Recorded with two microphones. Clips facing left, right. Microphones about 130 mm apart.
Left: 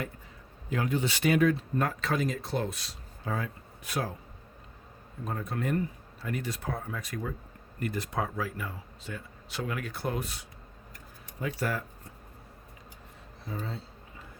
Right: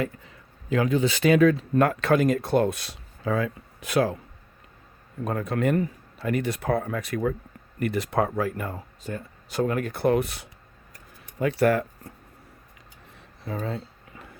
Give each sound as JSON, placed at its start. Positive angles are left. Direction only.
{"t": 0.7, "sound": "speech", "side_deg": -90}
{"t": 1.7, "sound": "speech", "side_deg": -70}
{"t": 5.2, "sound": "speech", "side_deg": -75}
{"t": 13.4, "sound": "a sound", "side_deg": -75}